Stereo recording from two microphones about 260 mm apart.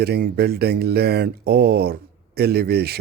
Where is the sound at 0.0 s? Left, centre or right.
Right.